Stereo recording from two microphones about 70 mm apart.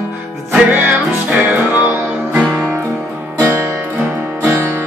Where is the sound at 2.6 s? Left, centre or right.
Right.